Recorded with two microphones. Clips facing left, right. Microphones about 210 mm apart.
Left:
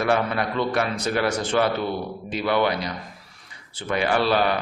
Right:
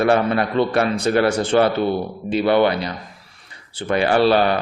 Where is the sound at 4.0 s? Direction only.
30° right (ahead or behind).